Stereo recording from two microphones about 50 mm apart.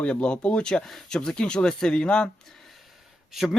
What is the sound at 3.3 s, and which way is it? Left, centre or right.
Speech, centre.